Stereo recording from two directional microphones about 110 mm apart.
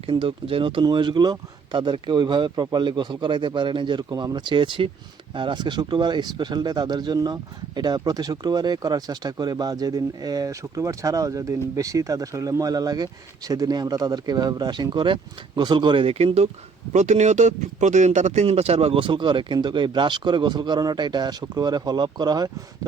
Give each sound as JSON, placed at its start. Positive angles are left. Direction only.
{"t": 0.0, "sound": "speech", "side_deg": -55}
{"t": 16.9, "sound": "speech", "side_deg": -90}